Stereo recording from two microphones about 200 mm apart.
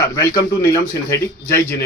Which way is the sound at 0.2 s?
15° left (ahead or behind).